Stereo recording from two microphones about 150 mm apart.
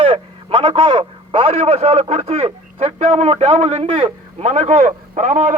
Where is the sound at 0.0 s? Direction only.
35° right (ahead or behind).